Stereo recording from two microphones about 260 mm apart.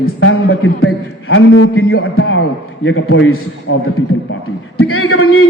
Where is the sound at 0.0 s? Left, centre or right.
Left.